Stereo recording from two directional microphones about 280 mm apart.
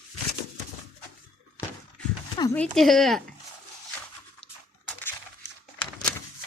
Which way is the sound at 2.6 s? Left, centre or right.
Centre.